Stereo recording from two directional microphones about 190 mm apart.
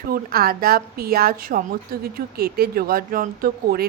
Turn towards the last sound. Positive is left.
turn(degrees=-50)  # may be behind; listen again after turning